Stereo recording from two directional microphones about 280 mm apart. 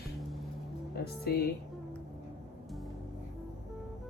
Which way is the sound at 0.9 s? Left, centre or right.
Left.